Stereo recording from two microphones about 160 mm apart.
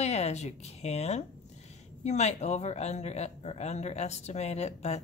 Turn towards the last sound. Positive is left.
turn(degrees=45)  # may be behind; listen again after turning